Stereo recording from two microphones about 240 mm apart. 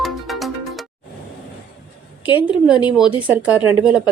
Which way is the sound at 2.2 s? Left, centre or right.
Centre.